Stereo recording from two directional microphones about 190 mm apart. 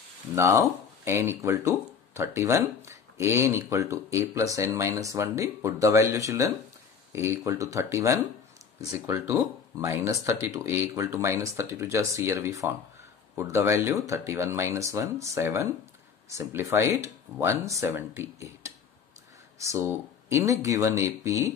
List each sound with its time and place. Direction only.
0.4 s speech: 15° right (ahead or behind)